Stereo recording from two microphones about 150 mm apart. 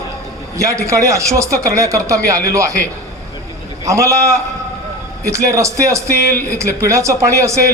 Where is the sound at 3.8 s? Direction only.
20° right (ahead or behind).